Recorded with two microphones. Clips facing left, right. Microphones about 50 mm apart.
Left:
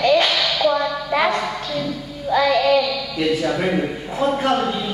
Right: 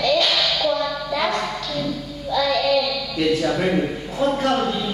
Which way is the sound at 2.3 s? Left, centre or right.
Left.